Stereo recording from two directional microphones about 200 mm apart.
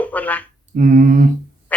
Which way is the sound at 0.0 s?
10° left (ahead or behind).